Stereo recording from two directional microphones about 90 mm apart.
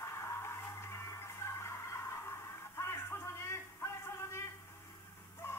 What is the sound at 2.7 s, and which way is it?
Music, 30° left (ahead or behind).